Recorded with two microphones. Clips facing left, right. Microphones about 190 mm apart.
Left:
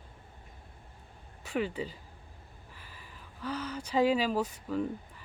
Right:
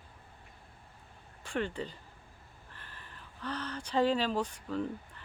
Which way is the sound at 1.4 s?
5° left (ahead or behind).